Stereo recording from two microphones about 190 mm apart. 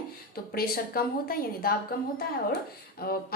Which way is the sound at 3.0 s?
55° left (ahead or behind).